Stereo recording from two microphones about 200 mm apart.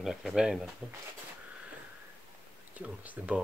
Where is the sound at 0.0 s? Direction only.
Centre (ahead or behind).